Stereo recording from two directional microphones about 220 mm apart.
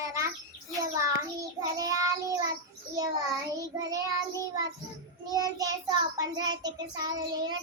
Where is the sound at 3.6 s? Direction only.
15° right (ahead or behind).